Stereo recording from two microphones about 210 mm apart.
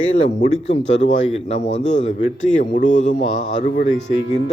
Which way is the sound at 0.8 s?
60° left (ahead or behind).